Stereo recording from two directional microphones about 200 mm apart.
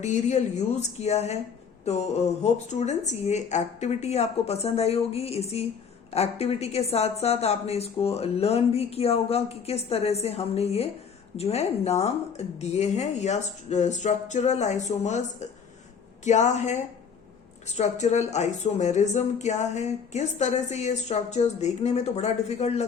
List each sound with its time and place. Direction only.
0.0 s a woman's voice: 35° left (ahead or behind)